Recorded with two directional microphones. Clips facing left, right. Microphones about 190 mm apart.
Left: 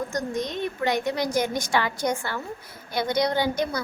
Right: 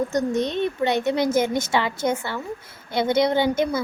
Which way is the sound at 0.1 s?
25° right (ahead or behind).